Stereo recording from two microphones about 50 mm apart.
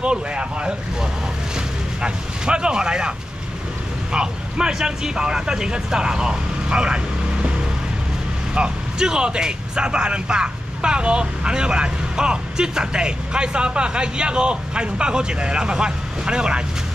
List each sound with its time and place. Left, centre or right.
0.0 s speech: right
2.0 s speech: centre
8.5 s speech: centre